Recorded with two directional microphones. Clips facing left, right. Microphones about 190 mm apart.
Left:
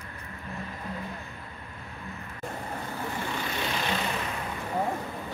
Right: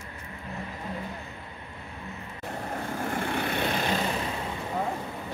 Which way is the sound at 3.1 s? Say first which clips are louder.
Right 5 dB; 55° right (ahead or behind).